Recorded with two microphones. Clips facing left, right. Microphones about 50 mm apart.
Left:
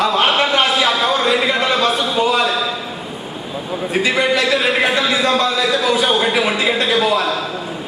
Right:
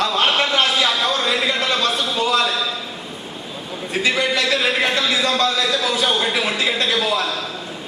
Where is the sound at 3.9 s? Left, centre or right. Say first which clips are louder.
Left 3 dB; centre.